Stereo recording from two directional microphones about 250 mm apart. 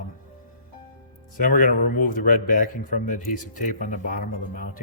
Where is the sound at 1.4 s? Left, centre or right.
Left.